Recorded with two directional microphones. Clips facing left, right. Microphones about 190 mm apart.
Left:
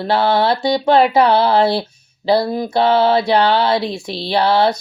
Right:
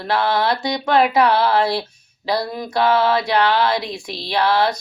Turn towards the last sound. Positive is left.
turn(degrees=30)  # may be behind; listen again after turning